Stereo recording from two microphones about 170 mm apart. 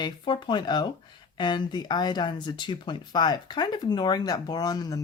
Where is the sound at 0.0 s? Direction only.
25° left (ahead or behind).